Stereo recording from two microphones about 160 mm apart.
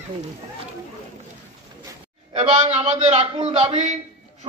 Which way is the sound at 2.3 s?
40° right (ahead or behind).